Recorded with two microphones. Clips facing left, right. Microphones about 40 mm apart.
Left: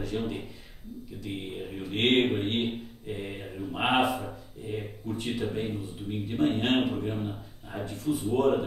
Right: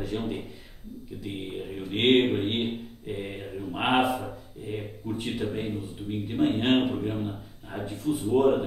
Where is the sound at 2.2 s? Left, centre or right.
Centre.